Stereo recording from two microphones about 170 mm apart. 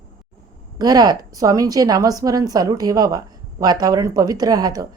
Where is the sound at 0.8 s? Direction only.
25° right (ahead or behind).